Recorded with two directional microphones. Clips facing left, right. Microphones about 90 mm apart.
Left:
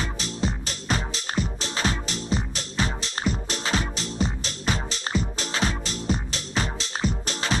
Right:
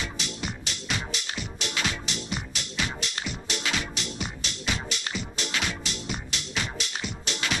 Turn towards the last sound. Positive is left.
turn(degrees=35)  # may be behind; listen again after turning